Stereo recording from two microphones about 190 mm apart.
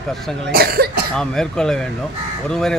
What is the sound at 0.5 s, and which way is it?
Cough, 55° right (ahead or behind).